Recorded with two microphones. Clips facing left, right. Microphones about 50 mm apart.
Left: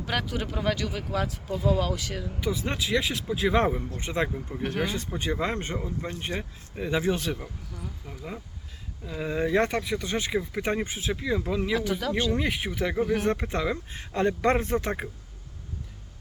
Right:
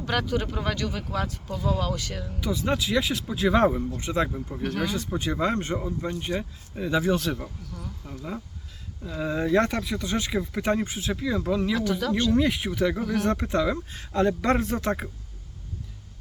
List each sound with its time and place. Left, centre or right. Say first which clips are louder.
0.0 s speech: right 3 dB; centre
4.4 s speech: right 1 dB; centre
6.1 s speech: right 3 dB; centre
10.3 s speech: right 3 dB; centre